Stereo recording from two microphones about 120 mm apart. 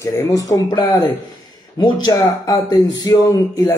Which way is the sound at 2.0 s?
30° left (ahead or behind).